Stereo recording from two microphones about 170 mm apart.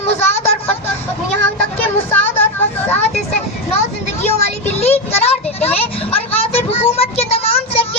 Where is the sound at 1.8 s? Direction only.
10° left (ahead or behind).